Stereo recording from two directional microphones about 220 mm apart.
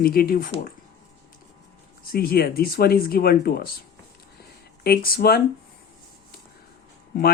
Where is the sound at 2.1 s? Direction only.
45° left (ahead or behind).